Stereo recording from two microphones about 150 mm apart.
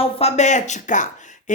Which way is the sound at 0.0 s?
45° left (ahead or behind).